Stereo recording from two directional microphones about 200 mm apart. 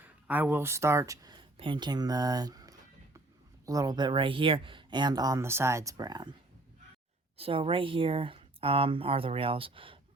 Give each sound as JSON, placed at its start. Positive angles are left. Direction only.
{"t": 0.0, "sound": "speech", "side_deg": -10}
{"t": 7.3, "sound": "speech", "side_deg": -25}